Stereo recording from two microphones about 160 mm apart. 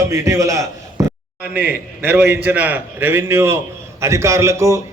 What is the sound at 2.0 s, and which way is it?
A man's voice, 10° right (ahead or behind).